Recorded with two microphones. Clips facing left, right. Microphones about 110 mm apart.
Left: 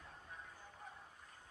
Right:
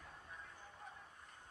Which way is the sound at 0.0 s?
Centre (ahead or behind).